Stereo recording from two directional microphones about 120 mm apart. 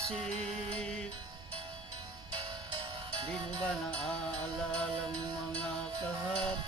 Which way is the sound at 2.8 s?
45° right (ahead or behind).